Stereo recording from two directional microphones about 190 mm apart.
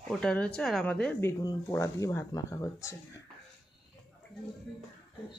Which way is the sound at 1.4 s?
15° left (ahead or behind).